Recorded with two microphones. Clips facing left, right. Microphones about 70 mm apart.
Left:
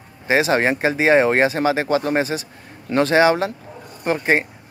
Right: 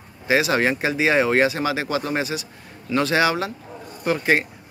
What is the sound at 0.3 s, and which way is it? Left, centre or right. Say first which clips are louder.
Speech: left 2 dB; left.